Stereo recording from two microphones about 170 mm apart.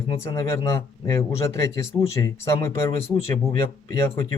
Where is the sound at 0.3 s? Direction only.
20° left (ahead or behind).